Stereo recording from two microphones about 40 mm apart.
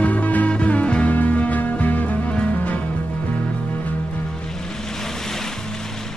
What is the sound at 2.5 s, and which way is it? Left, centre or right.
Music, left.